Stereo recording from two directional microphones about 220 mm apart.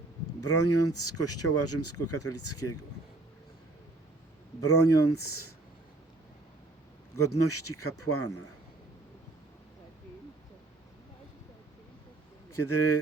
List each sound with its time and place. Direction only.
0.4 s speech: 90° left
4.6 s speech: 90° left
7.2 s speech: 90° left
12.5 s speech: 85° left